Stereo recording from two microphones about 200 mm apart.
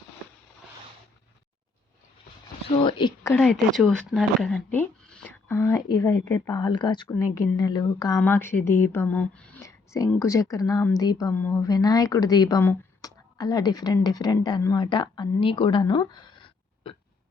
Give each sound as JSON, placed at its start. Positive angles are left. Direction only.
{"t": 2.7, "sound": "speech", "side_deg": 25}
{"t": 3.3, "sound": "speech", "side_deg": 0}